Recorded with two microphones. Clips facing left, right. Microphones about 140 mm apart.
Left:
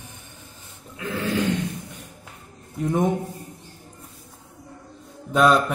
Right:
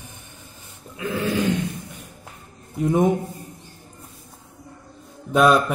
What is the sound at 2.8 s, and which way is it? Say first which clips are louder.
Speech: right 3 dB; 10° right (ahead or behind).